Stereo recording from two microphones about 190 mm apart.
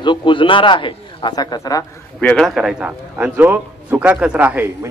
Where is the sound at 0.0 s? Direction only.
25° left (ahead or behind).